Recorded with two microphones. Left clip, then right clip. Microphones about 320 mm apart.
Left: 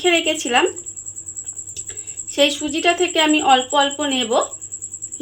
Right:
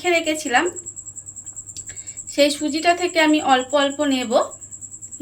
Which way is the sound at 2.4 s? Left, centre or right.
Centre.